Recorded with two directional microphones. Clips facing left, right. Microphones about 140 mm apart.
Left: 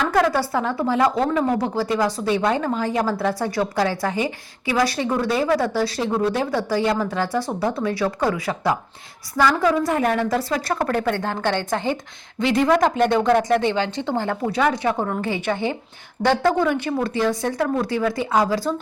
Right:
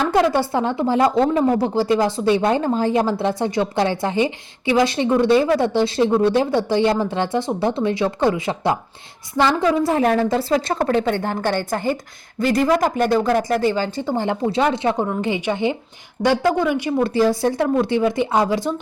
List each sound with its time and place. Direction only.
0.0 s a woman's voice: 25° right (ahead or behind); by 14.2 s 5° right (ahead or behind)
14.2 s a woman's voice: 25° right (ahead or behind)
17.0 s a woman's voice: 35° right (ahead or behind)